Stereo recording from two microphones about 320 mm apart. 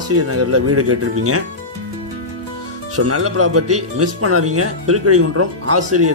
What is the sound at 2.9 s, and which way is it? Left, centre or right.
Speech, right.